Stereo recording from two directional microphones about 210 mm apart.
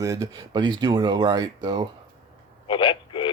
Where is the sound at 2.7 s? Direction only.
25° left (ahead or behind).